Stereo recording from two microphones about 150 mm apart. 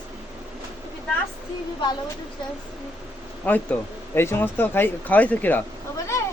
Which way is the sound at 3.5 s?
10° left (ahead or behind).